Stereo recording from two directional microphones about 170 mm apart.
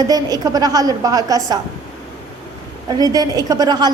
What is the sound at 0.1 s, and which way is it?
A woman's voice, 20° right (ahead or behind).